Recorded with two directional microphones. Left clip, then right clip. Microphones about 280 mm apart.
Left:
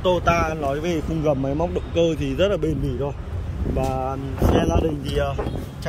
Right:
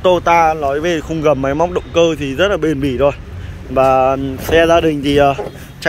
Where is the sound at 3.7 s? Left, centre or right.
Right.